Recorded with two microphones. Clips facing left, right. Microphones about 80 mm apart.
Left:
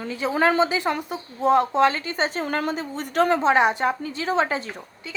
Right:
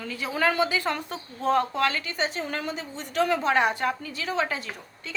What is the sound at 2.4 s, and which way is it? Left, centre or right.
A woman's voice, left.